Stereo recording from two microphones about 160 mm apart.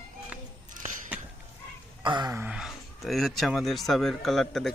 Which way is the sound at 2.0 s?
30° right (ahead or behind).